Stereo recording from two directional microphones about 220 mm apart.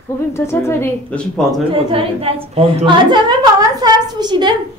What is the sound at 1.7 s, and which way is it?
A woman's voice, 25° right (ahead or behind).